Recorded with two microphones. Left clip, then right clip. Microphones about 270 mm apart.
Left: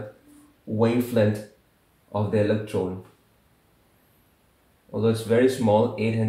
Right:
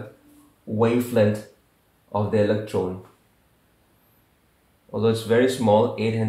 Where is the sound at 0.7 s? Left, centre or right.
Centre.